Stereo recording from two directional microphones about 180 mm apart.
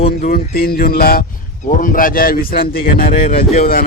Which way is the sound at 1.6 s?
50° left (ahead or behind).